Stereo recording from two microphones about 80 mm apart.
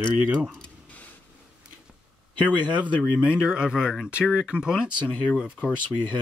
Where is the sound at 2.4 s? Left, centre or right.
Left.